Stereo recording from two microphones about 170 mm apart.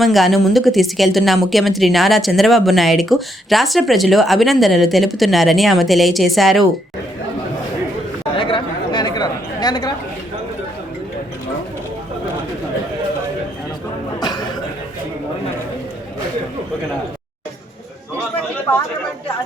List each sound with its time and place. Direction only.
0.0 s speech: centre (ahead or behind)
8.4 s chatter: 30° left (ahead or behind)
14.2 s a sound: 25° left (ahead or behind)